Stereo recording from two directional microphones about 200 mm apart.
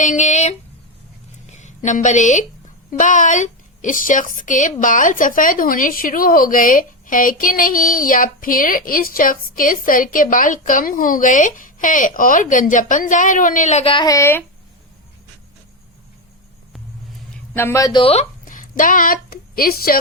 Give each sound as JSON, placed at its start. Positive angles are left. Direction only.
{"t": 0.0, "sound": "a sound", "side_deg": 35}
{"t": 3.0, "sound": "a woman's voice", "side_deg": 40}
{"t": 17.5, "sound": "a woman's voice", "side_deg": 10}